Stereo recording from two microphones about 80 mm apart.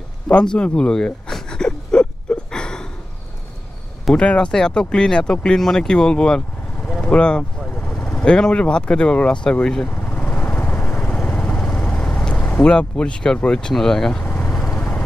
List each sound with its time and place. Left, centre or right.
0.3 s a sound: centre
4.1 s speech: centre
7.8 s vehicle: centre
8.2 s speech: centre
10.0 s vehicle: left
12.6 s speech: centre
14.4 s vehicle: centre